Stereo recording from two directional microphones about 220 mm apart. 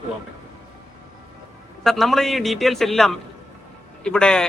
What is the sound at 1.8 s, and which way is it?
Speech, centre (ahead or behind).